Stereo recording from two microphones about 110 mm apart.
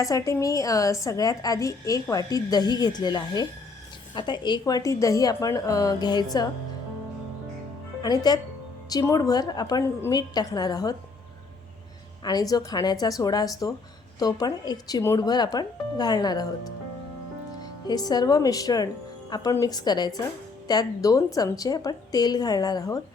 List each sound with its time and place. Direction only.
0.0 s a woman's voice: 30° left (ahead or behind)
4.6 s a woman's voice: 30° left (ahead or behind)
8.0 s a woman's voice: 40° left (ahead or behind)
12.2 s a woman's voice: 35° left (ahead or behind)